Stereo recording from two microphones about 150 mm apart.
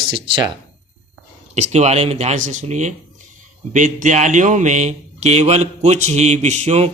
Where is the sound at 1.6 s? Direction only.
50° right (ahead or behind).